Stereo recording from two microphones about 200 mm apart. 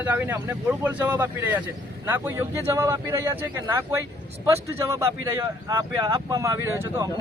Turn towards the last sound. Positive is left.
turn(degrees=-15)  # may be behind; listen again after turning